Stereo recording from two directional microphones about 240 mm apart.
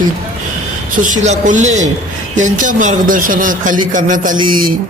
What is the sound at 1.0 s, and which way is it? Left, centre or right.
A man's voice, right.